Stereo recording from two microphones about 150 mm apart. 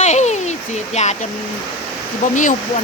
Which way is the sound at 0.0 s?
50° left (ahead or behind).